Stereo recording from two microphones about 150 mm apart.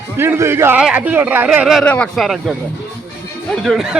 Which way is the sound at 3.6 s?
Centre (ahead or behind).